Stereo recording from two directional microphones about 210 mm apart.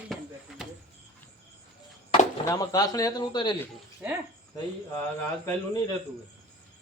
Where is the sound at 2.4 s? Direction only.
15° left (ahead or behind).